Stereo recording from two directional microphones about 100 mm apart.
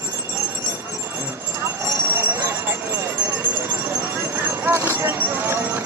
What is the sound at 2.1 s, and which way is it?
Jingle bell, 25° right (ahead or behind).